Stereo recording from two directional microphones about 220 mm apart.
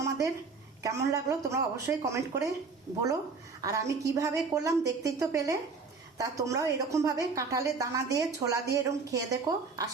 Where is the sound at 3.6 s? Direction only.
15° right (ahead or behind).